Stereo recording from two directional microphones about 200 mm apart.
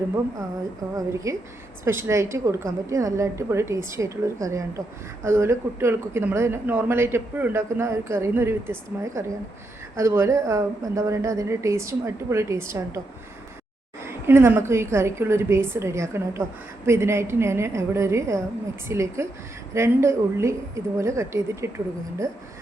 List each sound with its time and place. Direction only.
0.9 s speech: 15° right (ahead or behind)
14.0 s speech: 10° right (ahead or behind)